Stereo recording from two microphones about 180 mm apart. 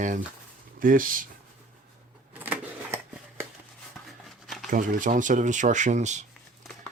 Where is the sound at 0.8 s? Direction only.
50° right (ahead or behind).